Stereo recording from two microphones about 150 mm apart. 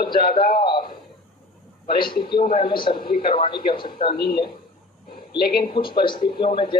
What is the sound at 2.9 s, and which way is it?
Speech, 75° left (ahead or behind).